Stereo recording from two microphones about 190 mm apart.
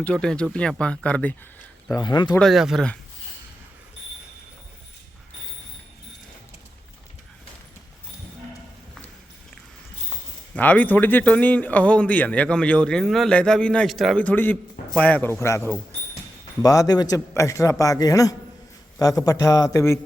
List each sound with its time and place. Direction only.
0.0 s speech: 5° left (ahead or behind)
2.0 s a man's voice: 20° left (ahead or behind)
2.4 s speech: centre (ahead or behind)
10.5 s a man's voice: 10° left (ahead or behind)